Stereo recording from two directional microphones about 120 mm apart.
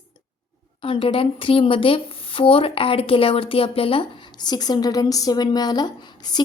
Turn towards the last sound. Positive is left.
turn(degrees=35)  # may be behind; listen again after turning